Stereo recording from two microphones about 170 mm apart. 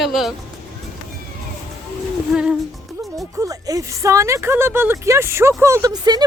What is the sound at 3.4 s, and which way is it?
Speech, 20° right (ahead or behind).